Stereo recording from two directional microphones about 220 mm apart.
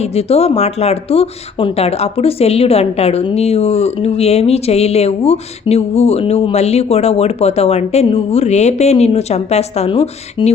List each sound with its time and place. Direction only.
0.0 s speech: 30° left (ahead or behind)